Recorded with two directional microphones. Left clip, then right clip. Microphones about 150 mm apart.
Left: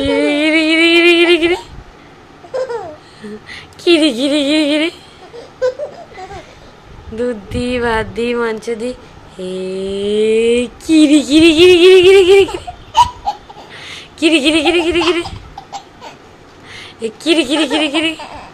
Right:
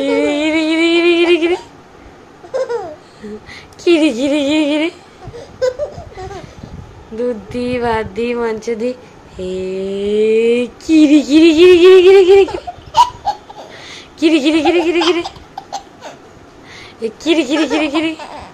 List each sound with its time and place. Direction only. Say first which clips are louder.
0.0 s music: left 1 dB; centre (ahead or behind)
3.4 s a sound: left 1 dB; 5° right (ahead or behind)
7.2 s speech: even; 5° right (ahead or behind)
9.4 s mantra: right 1 dB; 5° right (ahead or behind)
15.5 s a sound: right 2 dB; 25° right (ahead or behind)
16.7 s speech: even; 10° right (ahead or behind)